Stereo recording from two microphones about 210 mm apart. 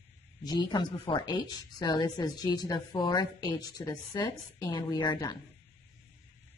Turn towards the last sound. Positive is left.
turn(degrees=20)  # may be behind; listen again after turning